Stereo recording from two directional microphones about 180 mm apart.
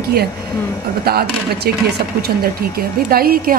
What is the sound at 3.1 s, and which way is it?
Speech, 55° right (ahead or behind).